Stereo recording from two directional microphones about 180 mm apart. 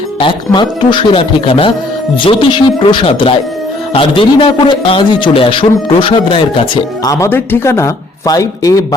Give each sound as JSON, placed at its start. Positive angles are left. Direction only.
{"t": 0.2, "sound": "a man's voice", "side_deg": 25}